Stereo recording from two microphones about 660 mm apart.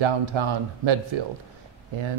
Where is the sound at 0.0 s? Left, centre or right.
Right.